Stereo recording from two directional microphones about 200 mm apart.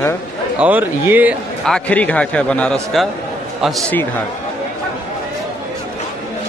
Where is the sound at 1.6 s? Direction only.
5° left (ahead or behind).